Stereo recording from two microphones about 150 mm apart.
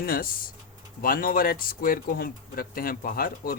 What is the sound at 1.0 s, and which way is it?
Speech, 70° left (ahead or behind).